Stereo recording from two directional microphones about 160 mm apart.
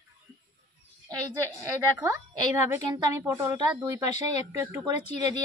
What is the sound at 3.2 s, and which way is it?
Speech, 15° right (ahead or behind).